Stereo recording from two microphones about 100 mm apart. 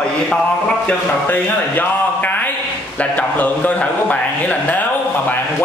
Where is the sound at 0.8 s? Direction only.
20° left (ahead or behind).